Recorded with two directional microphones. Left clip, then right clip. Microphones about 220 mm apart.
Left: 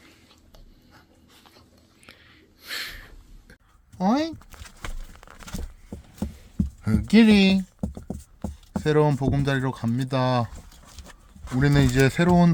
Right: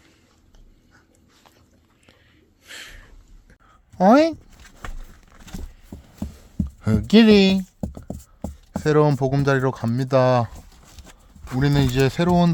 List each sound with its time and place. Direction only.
2.6 s a sound: 5° left (ahead or behind)
3.9 s speech: 40° right (ahead or behind)
6.8 s speech: 30° right (ahead or behind)
11.6 s speech: 10° right (ahead or behind)